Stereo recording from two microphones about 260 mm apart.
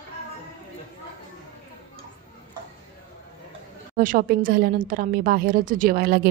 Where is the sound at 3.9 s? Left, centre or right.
Right.